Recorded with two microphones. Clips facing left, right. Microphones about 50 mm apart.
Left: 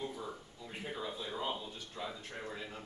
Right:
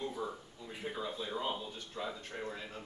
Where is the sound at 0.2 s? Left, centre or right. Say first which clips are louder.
Right 4 dB; centre.